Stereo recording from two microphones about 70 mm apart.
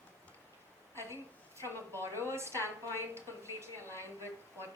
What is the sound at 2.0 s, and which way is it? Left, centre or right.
A woman's voice, right.